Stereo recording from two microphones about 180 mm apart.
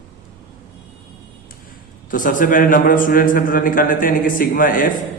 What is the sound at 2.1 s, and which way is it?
A man's voice, 50° left (ahead or behind).